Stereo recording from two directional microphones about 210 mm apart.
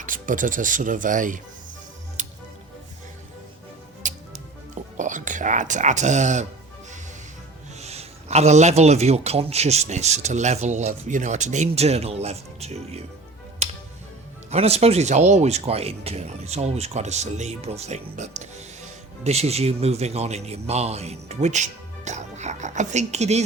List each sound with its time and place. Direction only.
0.0 s a man's voice: 40° right (ahead or behind)
2.2 s music: 35° right (ahead or behind)
4.9 s a man's voice: 35° right (ahead or behind)
7.8 s a man's voice: 30° right (ahead or behind)
14.5 s a man's voice: 30° right (ahead or behind)